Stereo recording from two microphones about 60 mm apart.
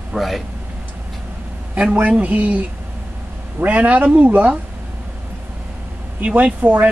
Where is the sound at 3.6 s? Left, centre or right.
Right.